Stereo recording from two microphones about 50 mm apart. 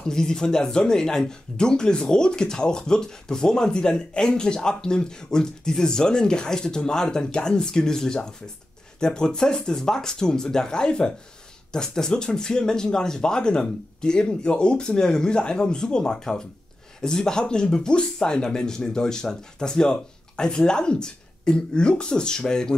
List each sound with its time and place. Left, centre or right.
0.0 s speech: centre